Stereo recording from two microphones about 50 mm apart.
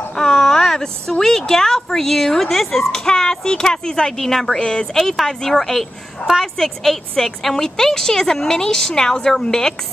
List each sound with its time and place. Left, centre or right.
0.2 s a woman's voice: centre